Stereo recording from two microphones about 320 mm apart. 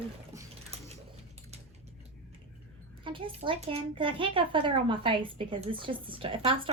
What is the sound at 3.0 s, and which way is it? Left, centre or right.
A child's voice, centre.